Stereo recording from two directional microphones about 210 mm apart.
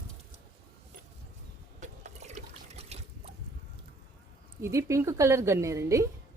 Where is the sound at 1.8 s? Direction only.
35° right (ahead or behind).